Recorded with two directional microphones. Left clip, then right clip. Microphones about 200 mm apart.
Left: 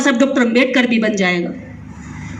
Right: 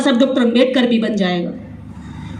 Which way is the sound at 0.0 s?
25° right (ahead or behind).